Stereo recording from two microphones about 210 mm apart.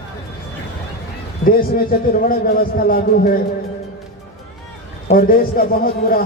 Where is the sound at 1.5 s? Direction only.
45° left (ahead or behind).